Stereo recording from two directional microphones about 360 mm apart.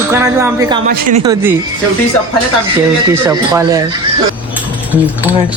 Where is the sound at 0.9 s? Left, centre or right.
Right.